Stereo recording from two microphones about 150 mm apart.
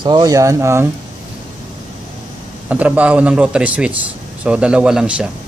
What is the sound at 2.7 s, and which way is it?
Speech, 10° right (ahead or behind).